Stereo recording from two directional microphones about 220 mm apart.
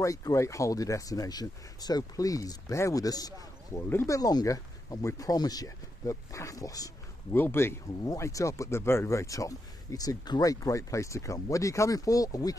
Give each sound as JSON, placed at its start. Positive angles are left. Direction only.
{"t": 0.0, "sound": "speech", "side_deg": 15}